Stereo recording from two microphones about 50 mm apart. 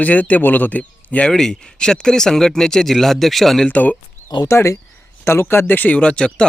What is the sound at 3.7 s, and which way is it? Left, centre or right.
Speech, left.